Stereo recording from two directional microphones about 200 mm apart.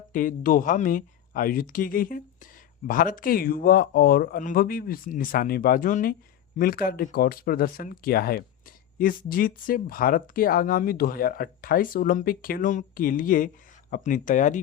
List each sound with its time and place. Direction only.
0.1 s speech: 45° left (ahead or behind)